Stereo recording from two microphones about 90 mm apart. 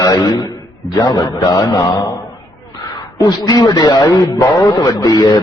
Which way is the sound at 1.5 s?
35° left (ahead or behind).